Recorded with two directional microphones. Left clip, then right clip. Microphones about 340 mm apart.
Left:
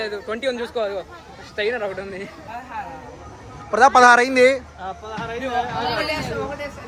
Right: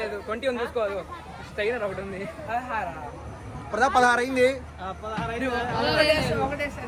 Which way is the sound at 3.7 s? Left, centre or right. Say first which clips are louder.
Left 9 dB; left.